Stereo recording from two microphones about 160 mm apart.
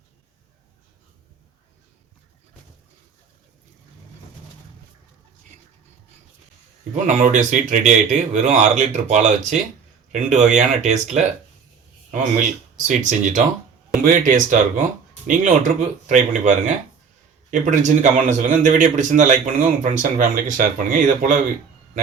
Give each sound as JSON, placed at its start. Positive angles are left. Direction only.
{"t": 6.9, "sound": "speech", "side_deg": -50}